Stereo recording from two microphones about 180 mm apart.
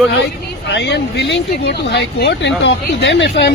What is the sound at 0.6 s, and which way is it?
Speech, 75° left (ahead or behind).